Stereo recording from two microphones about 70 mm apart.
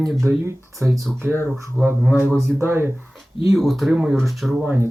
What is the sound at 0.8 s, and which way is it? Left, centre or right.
A man's voice, centre.